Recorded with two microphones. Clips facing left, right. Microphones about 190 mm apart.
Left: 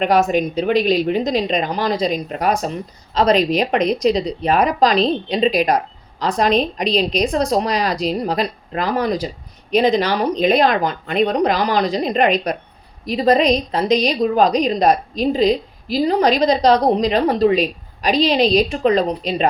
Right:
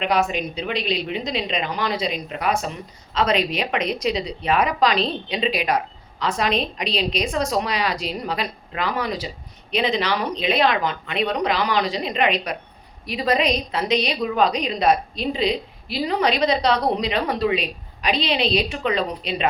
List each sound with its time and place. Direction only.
0.0 s a woman's voice: 45° left (ahead or behind)